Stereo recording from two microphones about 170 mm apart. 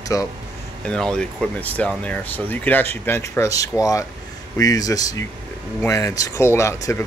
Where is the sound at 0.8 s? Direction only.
5° left (ahead or behind).